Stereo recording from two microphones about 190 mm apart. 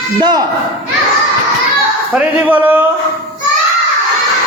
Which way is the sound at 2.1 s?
10° right (ahead or behind).